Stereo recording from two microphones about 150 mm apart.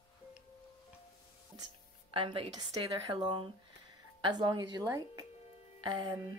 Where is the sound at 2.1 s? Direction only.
35° right (ahead or behind).